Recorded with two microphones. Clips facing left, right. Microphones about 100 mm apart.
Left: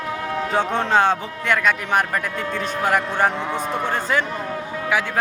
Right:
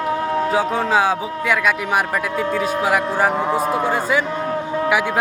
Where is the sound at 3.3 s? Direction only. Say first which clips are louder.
Right 6 dB; 40° right (ahead or behind).